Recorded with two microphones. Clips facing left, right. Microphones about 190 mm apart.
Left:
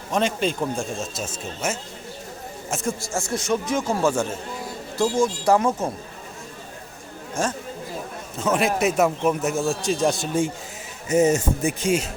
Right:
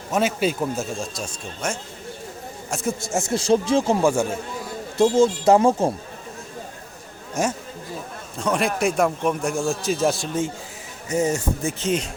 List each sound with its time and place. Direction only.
0.1 s a man's voice: 5° right (ahead or behind)
3.0 s speech: 20° right (ahead or behind)
3.3 s speech: 30° right (ahead or behind)
4.0 s a man's voice: 10° right (ahead or behind)
4.9 s speech: 20° right (ahead or behind)
8.4 s a man's voice: centre (ahead or behind)
11.1 s speech: 20° left (ahead or behind)